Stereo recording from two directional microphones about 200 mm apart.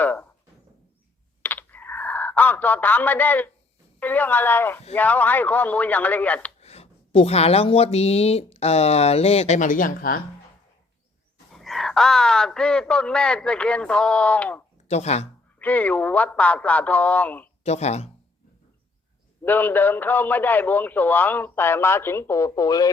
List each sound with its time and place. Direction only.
0.0 s a sound: 10° left (ahead or behind)
1.4 s a sound: 10° left (ahead or behind)
4.0 s a man's voice: 10° left (ahead or behind)
6.6 s speech: 30° left (ahead or behind)
11.5 s speech: centre (ahead or behind)
14.8 s speech: 35° left (ahead or behind)
15.5 s a man's voice: 10° left (ahead or behind)
17.6 s speech: 35° left (ahead or behind)
19.5 s a man's voice: 10° left (ahead or behind)